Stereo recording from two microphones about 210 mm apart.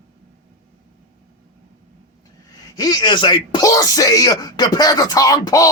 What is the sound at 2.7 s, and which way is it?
Speech, 20° left (ahead or behind).